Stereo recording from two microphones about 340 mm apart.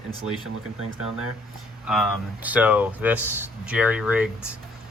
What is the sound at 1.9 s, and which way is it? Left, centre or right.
Speech, centre.